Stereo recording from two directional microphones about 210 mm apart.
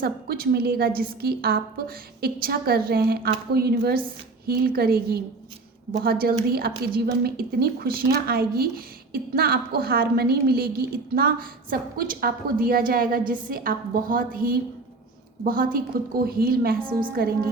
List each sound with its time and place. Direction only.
0.0 s a woman's voice: 45° right (ahead or behind)